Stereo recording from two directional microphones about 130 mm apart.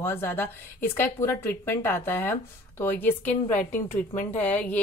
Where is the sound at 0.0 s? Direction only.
20° left (ahead or behind).